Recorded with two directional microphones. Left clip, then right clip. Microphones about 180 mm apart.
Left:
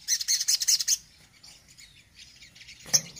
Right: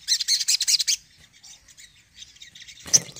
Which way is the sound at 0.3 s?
35° right (ahead or behind).